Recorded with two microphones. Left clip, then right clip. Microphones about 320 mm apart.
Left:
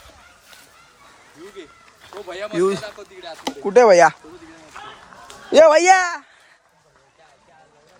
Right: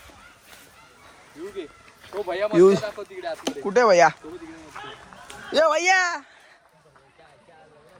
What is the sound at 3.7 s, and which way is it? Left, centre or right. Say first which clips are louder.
Speech: left 5 dB; centre.